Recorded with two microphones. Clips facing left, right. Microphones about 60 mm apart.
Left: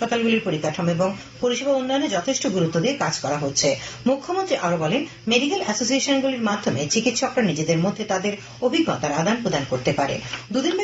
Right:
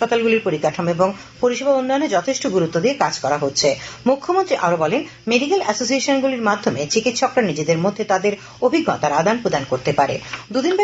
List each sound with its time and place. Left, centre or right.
0.0 s speech: right